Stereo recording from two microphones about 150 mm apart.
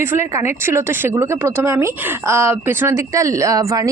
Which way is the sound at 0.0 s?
15° right (ahead or behind).